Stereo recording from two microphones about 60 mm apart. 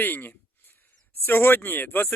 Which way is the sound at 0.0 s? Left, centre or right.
Left.